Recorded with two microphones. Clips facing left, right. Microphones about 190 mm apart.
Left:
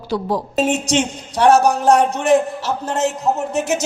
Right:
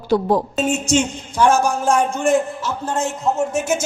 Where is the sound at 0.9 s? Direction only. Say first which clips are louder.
Even; 70° left (ahead or behind).